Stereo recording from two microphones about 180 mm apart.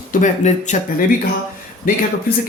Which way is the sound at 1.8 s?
50° left (ahead or behind).